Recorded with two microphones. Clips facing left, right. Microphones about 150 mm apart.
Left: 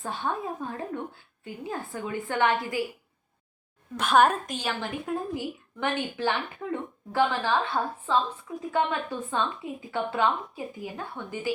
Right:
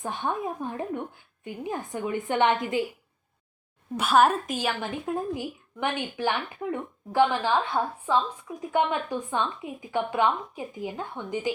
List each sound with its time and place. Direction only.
0.0 s a woman's voice: 15° right (ahead or behind)
3.9 s a woman's voice: 5° right (ahead or behind)